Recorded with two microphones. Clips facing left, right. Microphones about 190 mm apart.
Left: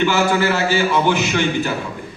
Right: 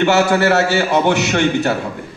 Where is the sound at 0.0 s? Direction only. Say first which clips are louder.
Right 3 dB; 65° right (ahead or behind).